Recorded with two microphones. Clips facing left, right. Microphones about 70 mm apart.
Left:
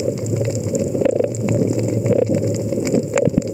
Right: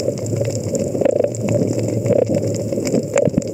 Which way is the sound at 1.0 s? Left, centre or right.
Centre.